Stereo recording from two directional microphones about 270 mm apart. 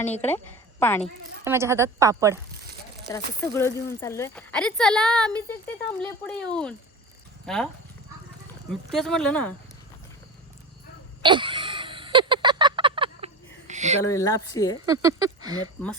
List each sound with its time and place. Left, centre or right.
0.8 s speech: centre
1.5 s a woman's voice: centre
3.1 s speech: centre
8.7 s speech: centre
11.2 s a sound: centre
14.0 s speech: centre
14.8 s a woman's voice: centre